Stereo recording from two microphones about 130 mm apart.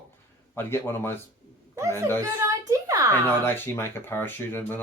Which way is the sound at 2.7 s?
25° right (ahead or behind).